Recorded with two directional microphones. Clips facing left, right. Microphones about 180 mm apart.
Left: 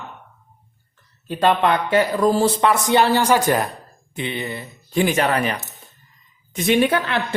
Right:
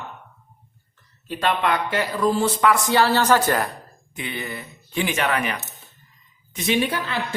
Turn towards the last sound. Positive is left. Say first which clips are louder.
# left 5 dB
turn(degrees=60)  # may be behind; listen again after turning